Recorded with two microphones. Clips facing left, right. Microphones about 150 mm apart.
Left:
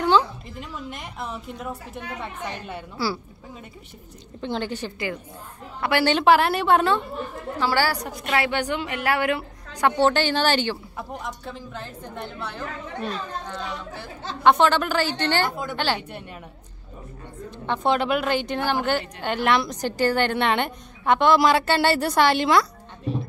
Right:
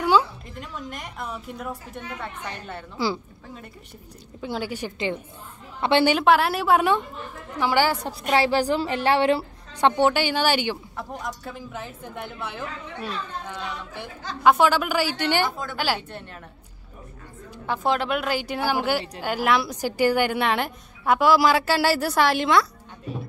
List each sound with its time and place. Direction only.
0.0 s a sound: 10° right (ahead or behind)
0.7 s a woman's voice: centre (ahead or behind)
3.0 s a woman's voice: 15° right (ahead or behind)
4.4 s a woman's voice: 5° right (ahead or behind); by 6.0 s 25° right (ahead or behind)
6.0 s a woman's voice: centre (ahead or behind)
7.5 s a woman's voice: 15° right (ahead or behind)
9.9 s a woman's voice: 10° right (ahead or behind)
11.0 s a woman's voice: 5° left (ahead or behind)
14.4 s a woman's voice: 5° right (ahead or behind)
17.6 s a woman's voice: centre (ahead or behind)